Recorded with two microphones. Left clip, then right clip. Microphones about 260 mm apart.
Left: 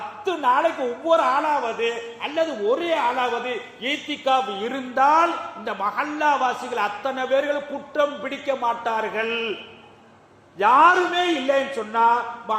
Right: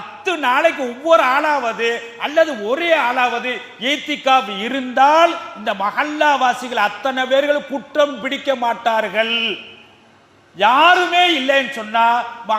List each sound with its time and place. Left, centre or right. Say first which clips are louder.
0.3 s a man's voice: right 4 dB; right
10.6 s a man's voice: right 3 dB; right